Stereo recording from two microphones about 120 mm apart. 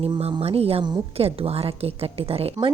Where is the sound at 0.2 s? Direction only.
55° right (ahead or behind).